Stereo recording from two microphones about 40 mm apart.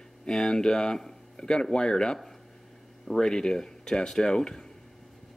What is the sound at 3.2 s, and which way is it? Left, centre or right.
Speech, centre.